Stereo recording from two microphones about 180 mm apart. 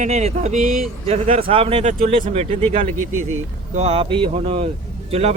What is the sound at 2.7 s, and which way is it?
Speech, 45° right (ahead or behind).